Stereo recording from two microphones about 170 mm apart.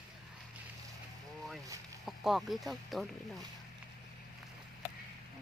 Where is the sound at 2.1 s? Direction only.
Centre (ahead or behind).